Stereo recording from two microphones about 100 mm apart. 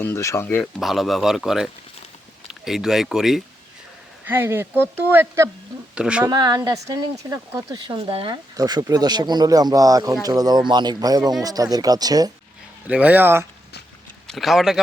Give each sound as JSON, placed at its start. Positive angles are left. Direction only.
{"t": 0.0, "sound": "speech", "side_deg": 30}
{"t": 0.6, "sound": "speech", "side_deg": 0}
{"t": 4.3, "sound": "speech", "side_deg": -20}
{"t": 5.9, "sound": "speech", "side_deg": -10}
{"t": 6.2, "sound": "speech", "side_deg": -40}
{"t": 7.9, "sound": "speech", "side_deg": -60}
{"t": 8.5, "sound": "speech", "side_deg": -40}
{"t": 12.9, "sound": "speech", "side_deg": -15}
{"t": 14.3, "sound": "speech", "side_deg": 0}